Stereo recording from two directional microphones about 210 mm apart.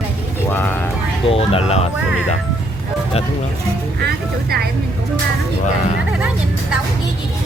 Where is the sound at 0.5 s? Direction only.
10° left (ahead or behind).